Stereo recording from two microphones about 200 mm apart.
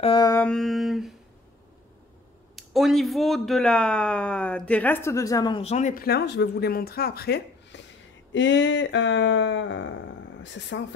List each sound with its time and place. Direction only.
0.0 s mantra: 20° left (ahead or behind)
0.4 s mantra: 5° left (ahead or behind)
2.5 s speech: centre (ahead or behind); by 7.8 s 55° left (ahead or behind)
8.3 s a sound: 65° left (ahead or behind)